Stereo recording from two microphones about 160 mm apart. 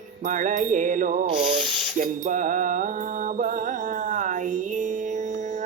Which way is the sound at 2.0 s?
50° right (ahead or behind).